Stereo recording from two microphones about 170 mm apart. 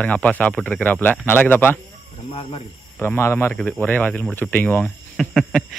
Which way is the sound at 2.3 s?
35° left (ahead or behind).